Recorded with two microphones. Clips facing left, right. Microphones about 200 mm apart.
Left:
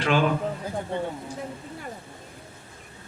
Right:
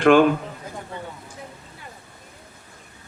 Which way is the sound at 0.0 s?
55° right (ahead or behind).